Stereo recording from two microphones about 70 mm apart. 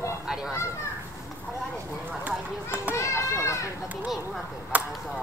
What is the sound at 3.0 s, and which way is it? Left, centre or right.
Speech, left.